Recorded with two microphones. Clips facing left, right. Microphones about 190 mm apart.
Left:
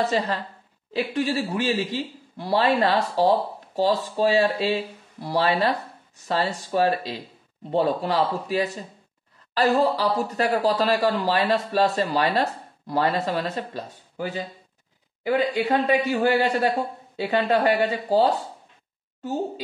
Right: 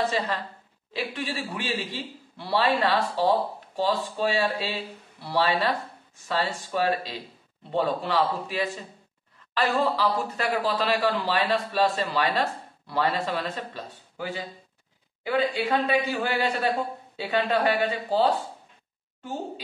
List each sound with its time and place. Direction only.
0.0 s a woman's voice: 45° left (ahead or behind)